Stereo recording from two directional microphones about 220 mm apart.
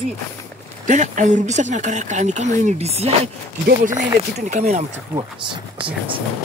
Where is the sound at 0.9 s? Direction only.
35° right (ahead or behind).